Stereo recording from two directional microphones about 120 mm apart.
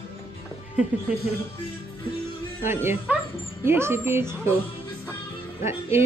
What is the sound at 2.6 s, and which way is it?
Speech, 20° right (ahead or behind).